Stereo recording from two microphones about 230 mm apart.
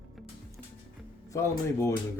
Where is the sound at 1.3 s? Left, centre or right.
Centre.